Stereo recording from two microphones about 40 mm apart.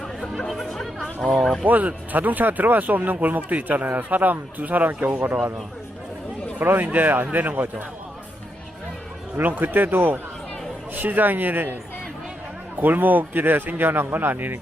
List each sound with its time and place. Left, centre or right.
0.0 s chatter: centre
0.5 s speech: centre
0.9 s speech: centre
1.6 s speech: right
6.7 s a man's voice: right
9.4 s a man's voice: right